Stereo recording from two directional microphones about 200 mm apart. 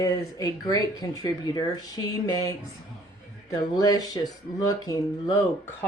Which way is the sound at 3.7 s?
20° left (ahead or behind).